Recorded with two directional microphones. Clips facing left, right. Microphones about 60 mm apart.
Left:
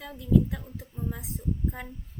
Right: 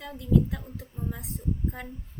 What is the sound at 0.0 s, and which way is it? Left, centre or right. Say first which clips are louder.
Speech: left 1 dB; centre.